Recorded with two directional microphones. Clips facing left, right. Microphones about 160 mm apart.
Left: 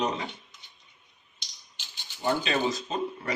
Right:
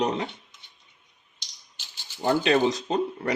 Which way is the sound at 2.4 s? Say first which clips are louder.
Right 6 dB; 70° right (ahead or behind).